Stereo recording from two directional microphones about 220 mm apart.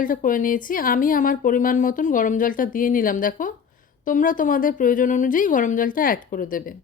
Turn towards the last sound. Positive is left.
turn(degrees=40)  # may be behind; listen again after turning